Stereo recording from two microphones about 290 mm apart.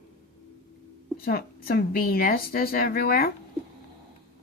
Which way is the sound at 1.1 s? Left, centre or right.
Left.